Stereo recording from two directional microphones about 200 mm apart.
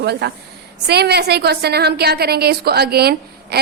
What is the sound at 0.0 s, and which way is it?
A woman's voice, 55° right (ahead or behind).